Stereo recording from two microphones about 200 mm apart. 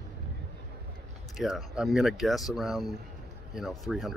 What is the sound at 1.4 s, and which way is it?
Speech, centre (ahead or behind).